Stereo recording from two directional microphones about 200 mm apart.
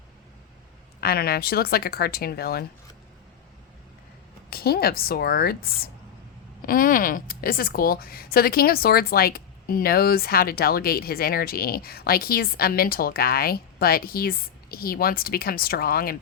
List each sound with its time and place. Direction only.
1.0 s a woman's voice: 50° left (ahead or behind)
4.4 s a woman's voice: 50° left (ahead or behind)